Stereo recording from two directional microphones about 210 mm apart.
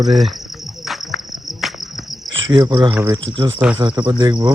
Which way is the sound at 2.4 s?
20° right (ahead or behind).